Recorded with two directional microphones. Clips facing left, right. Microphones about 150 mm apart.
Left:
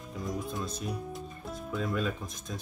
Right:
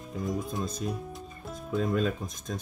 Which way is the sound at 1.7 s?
40° right (ahead or behind).